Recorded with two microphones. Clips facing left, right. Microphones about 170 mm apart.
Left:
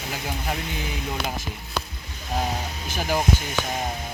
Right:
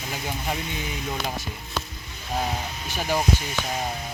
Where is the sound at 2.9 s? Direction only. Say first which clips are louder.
Left 1 dB; 5° left (ahead or behind).